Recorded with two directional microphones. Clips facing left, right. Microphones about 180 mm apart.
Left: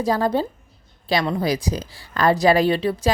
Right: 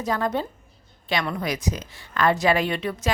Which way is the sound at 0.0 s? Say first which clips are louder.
Left 5 dB; 35° left (ahead or behind).